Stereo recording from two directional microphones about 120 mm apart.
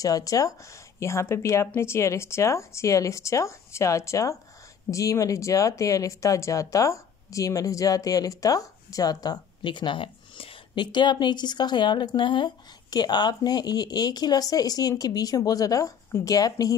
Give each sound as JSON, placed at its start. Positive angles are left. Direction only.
{"t": 0.0, "sound": "speech", "side_deg": 30}